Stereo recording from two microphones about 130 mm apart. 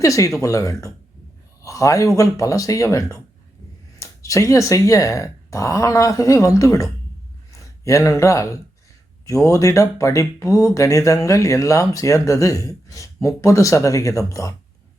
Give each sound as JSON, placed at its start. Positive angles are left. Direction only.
{"t": 0.0, "sound": "speech", "side_deg": 25}